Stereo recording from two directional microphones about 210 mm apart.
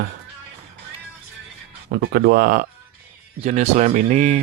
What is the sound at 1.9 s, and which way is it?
Speech, 50° right (ahead or behind).